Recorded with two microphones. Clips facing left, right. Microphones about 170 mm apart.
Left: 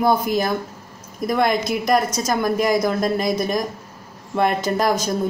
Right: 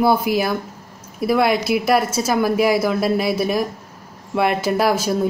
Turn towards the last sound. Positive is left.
turn(degrees=-5)  # may be behind; listen again after turning